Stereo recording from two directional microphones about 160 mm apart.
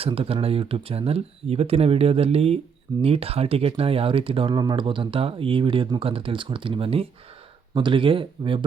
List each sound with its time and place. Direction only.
0.0 s speech: 35° right (ahead or behind)